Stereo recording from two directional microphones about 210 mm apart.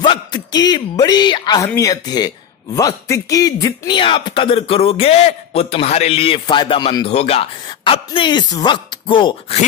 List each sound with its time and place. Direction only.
0.0 s speech: 20° left (ahead or behind)